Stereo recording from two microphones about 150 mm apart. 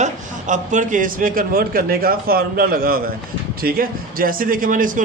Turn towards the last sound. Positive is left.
turn(degrees=-60)  # may be behind; listen again after turning